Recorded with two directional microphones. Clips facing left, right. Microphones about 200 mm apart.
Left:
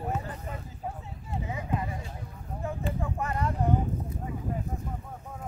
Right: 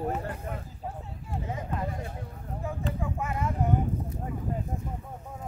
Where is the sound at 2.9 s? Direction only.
5° right (ahead or behind).